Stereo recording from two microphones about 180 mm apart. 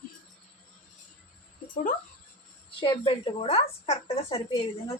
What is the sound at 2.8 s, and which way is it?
A woman's voice, 30° left (ahead or behind).